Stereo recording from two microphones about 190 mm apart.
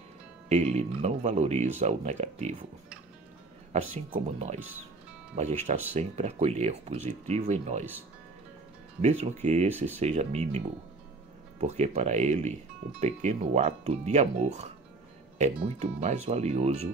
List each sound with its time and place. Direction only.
0.5 s speech: 35° right (ahead or behind)
4.1 s speech: 35° right (ahead or behind)
9.0 s speech: 35° right (ahead or behind)
11.6 s speech: 35° right (ahead or behind)